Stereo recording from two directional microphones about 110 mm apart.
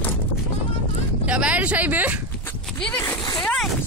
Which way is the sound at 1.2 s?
10° right (ahead or behind).